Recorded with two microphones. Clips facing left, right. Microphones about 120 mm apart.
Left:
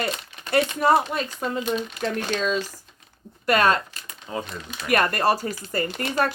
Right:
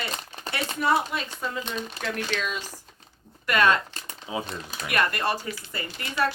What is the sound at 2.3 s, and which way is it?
Speech, 30° left (ahead or behind).